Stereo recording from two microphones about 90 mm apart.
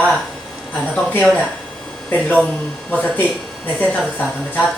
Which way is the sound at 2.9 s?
20° left (ahead or behind).